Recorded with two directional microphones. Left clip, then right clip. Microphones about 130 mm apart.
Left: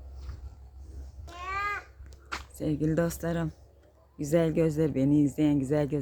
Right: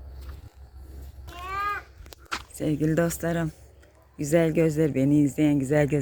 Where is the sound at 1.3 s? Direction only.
10° right (ahead or behind).